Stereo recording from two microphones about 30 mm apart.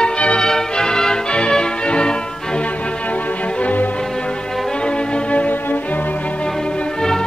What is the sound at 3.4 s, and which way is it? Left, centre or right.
Music, left.